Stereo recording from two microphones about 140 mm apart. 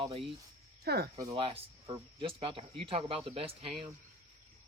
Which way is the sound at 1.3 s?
45° right (ahead or behind).